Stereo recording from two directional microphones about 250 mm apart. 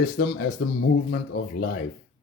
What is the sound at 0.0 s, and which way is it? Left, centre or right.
Speech, left.